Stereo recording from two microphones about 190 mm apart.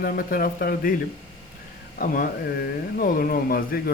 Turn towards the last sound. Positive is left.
turn(degrees=50)  # may be behind; listen again after turning